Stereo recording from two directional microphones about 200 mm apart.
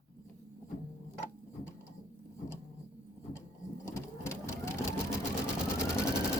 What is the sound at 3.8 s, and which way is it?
Sewing machine, 15° left (ahead or behind).